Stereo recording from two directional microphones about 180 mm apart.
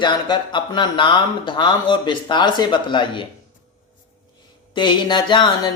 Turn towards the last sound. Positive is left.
turn(degrees=25)  # may be behind; listen again after turning